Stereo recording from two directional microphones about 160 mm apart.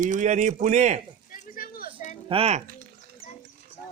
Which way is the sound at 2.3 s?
40° right (ahead or behind).